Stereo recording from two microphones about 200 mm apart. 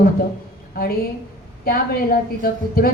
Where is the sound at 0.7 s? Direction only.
50° left (ahead or behind).